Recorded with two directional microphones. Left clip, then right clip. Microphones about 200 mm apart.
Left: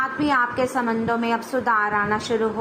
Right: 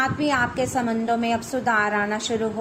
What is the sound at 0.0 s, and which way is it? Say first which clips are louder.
A woman's voice: left 1 dB; 25° right (ahead or behind).